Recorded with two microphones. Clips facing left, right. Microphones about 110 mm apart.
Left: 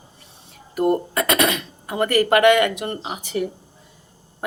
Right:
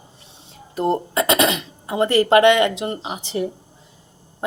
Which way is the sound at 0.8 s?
25° right (ahead or behind).